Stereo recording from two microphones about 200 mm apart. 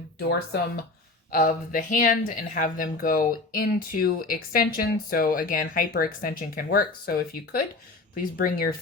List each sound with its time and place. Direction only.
1.3 s speech: 45° left (ahead or behind)